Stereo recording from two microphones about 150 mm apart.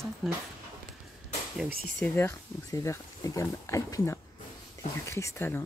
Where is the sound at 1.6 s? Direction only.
80° right.